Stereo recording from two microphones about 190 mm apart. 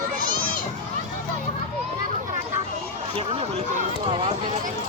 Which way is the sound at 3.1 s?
30° right (ahead or behind).